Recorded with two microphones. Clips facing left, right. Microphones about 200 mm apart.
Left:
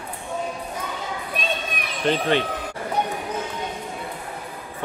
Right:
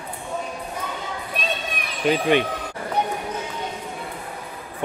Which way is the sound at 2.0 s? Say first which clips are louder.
Right 2 dB; 15° right (ahead or behind).